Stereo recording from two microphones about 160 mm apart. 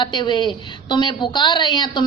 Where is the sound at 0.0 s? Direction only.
30° left (ahead or behind).